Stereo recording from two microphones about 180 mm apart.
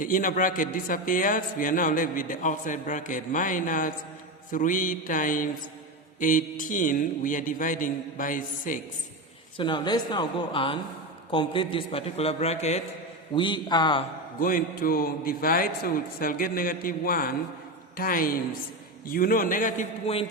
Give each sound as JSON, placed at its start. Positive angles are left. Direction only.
{"t": 0.0, "sound": "a man's voice", "side_deg": 50}
{"t": 9.6, "sound": "a man's voice", "side_deg": 25}
{"t": 13.3, "sound": "speech", "side_deg": 25}
{"t": 14.3, "sound": "a man's voice", "side_deg": 50}
{"t": 20.1, "sound": "a man's voice", "side_deg": 35}